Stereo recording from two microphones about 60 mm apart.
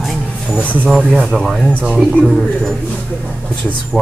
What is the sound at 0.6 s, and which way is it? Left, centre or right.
Speech, left.